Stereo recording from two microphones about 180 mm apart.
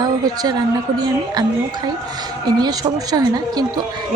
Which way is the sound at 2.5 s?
20° right (ahead or behind).